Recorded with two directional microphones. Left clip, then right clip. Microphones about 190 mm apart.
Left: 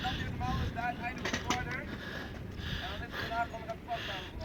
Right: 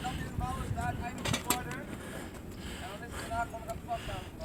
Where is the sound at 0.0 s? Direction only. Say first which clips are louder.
Left 2 dB; 15° right (ahead or behind).